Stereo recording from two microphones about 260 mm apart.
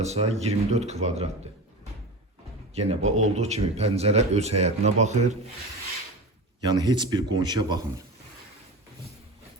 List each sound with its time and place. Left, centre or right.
0.0 s a man's voice: right
2.7 s a man's voice: right
6.6 s a man's voice: centre